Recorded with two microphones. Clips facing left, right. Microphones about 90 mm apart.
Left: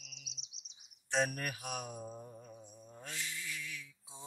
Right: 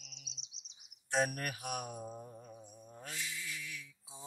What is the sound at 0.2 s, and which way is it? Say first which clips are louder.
Chirp: even; 30° right (ahead or behind).